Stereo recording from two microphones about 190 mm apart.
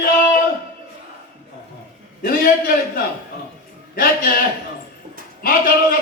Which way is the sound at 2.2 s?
50° left (ahead or behind).